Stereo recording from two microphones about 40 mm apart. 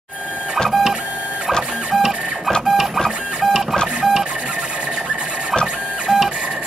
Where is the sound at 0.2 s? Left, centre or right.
Right.